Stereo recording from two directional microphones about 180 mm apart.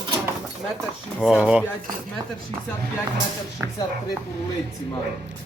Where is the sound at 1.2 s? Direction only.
5° right (ahead or behind).